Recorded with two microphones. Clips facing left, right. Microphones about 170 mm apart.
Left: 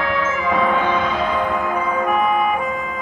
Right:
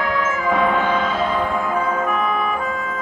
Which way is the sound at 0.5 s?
Centre (ahead or behind).